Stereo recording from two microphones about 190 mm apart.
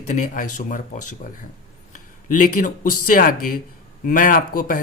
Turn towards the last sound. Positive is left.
turn(degrees=45)  # may be behind; listen again after turning